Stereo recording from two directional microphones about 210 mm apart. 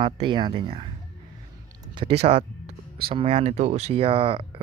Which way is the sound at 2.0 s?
25° right (ahead or behind).